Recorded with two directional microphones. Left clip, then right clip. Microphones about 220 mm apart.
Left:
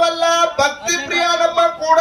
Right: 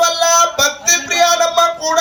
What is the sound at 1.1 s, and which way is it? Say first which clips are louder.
Music: right 1 dB; 50° right (ahead or behind).